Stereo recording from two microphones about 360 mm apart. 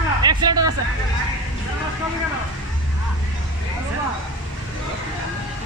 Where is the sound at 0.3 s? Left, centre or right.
Centre.